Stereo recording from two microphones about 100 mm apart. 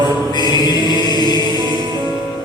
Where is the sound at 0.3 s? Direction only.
45° left (ahead or behind).